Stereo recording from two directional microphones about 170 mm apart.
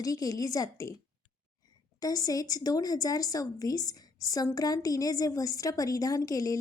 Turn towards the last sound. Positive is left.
turn(degrees=20)  # may be behind; listen again after turning